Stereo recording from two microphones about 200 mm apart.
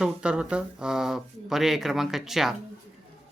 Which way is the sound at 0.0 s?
5° right (ahead or behind).